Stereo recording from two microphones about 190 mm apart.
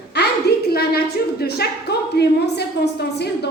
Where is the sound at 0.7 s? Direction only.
55° left (ahead or behind).